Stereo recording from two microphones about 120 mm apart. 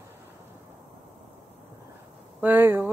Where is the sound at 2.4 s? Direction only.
15° right (ahead or behind).